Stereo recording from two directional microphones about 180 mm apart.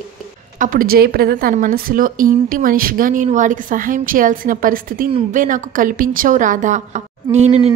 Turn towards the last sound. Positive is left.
turn(degrees=-35)  # may be behind; listen again after turning